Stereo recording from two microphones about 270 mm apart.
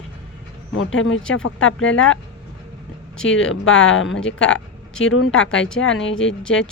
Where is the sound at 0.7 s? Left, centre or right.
Left.